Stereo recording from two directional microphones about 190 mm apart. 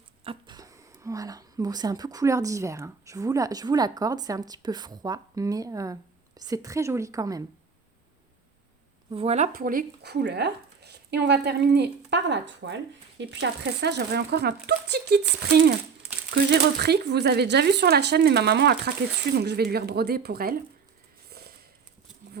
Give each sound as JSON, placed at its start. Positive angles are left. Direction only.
{"t": 0.3, "sound": "speech", "side_deg": -20}
{"t": 9.0, "sound": "speech", "side_deg": -30}
{"t": 9.5, "sound": "speech", "side_deg": -50}
{"t": 16.3, "sound": "speech", "side_deg": -60}
{"t": 21.2, "sound": "a sound", "side_deg": -55}